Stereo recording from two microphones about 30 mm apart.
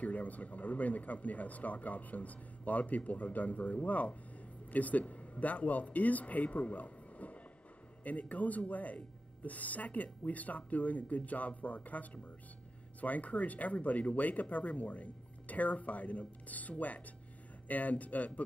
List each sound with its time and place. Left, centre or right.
0.0 s speech: left